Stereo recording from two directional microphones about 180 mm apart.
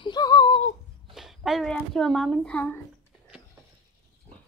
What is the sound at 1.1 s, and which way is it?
Speech, centre (ahead or behind).